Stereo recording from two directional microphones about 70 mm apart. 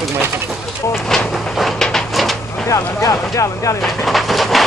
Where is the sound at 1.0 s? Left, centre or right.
Centre.